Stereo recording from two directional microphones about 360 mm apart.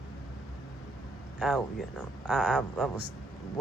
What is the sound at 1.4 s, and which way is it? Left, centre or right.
Speech, centre.